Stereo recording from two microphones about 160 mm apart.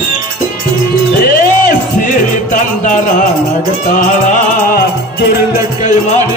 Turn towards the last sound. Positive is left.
turn(degrees=70)  # may be behind; listen again after turning